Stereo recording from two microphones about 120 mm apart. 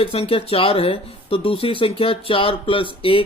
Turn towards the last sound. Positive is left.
turn(degrees=45)  # may be behind; listen again after turning